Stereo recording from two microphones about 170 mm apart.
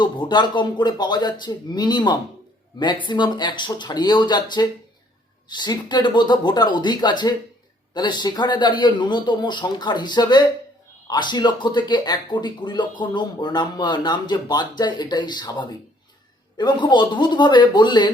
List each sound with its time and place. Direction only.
0.0 s speech: 25° left (ahead or behind)